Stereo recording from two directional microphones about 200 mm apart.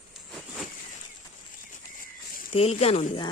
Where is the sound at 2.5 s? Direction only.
30° left (ahead or behind).